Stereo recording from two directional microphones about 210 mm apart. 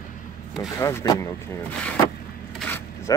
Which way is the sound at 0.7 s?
15° left (ahead or behind).